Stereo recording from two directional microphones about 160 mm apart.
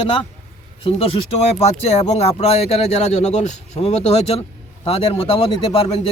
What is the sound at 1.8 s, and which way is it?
A man's voice, 40° left (ahead or behind).